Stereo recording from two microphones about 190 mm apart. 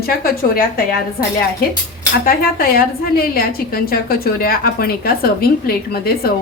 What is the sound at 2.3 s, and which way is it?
A woman's voice, 50° left (ahead or behind).